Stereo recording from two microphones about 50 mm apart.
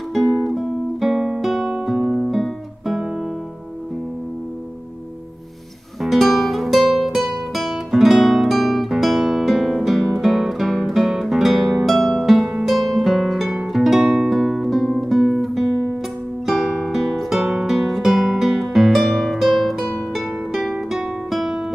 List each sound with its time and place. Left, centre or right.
0.1 s guitar: centre
2.0 s music: centre
2.3 s guitar: centre
6.0 s music: centre
12.6 s harp: centre
13.7 s music: centre
15.0 s guitar: centre
16.8 s music: centre
20.9 s guitar: centre